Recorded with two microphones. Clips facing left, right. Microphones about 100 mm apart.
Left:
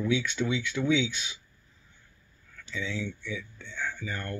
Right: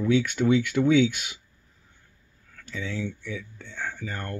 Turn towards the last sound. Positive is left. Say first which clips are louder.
# right 2 dB
turn(degrees=-50)  # may be behind; listen again after turning